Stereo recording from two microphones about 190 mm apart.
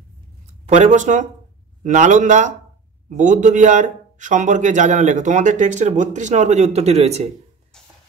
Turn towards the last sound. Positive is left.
turn(degrees=-35)  # may be behind; listen again after turning